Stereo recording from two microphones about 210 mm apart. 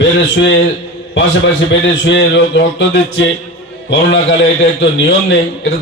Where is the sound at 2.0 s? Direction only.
60° left (ahead or behind).